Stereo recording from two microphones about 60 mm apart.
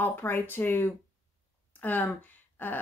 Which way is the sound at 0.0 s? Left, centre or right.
Left.